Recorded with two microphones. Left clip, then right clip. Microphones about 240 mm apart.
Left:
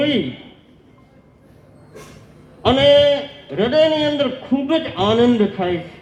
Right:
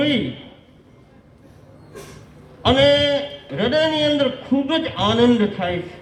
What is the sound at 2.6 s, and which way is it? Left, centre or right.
A man's voice, right.